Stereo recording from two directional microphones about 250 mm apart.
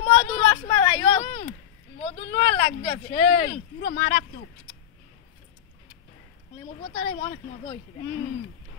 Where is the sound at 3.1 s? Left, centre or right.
Left.